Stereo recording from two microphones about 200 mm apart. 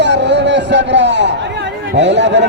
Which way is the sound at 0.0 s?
60° right (ahead or behind).